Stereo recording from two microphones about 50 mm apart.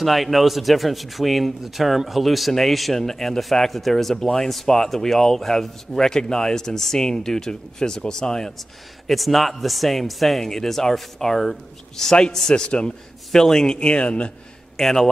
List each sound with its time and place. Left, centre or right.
0.0 s a man's voice: centre
8.5 s a man's voice: centre; by 14.3 s left
14.8 s a man's voice: centre